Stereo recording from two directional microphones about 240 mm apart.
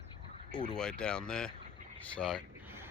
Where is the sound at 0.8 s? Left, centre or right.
Centre.